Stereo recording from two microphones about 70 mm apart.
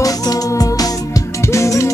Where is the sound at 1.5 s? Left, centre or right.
Left.